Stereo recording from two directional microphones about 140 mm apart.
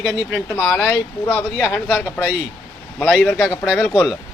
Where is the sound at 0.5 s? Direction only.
15° left (ahead or behind).